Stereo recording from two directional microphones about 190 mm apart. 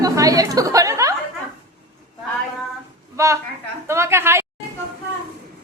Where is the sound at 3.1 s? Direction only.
15° right (ahead or behind).